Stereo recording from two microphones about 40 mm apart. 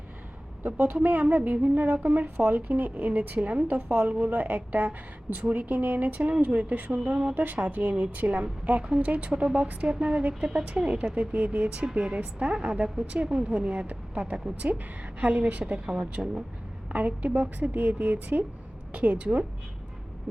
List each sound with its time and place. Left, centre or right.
1.0 s a woman's voice: right
7.4 s a woman's voice: right
15.9 s speech: right
16.9 s a woman's voice: right